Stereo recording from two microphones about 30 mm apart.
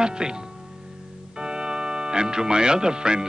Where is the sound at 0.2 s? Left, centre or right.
Right.